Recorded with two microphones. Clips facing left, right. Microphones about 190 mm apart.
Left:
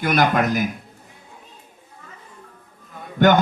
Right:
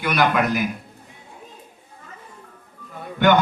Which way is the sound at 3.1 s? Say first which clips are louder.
Left 1 dB; 45° left (ahead or behind).